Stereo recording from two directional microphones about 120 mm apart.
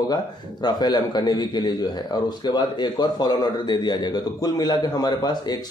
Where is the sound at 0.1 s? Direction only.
35° left (ahead or behind).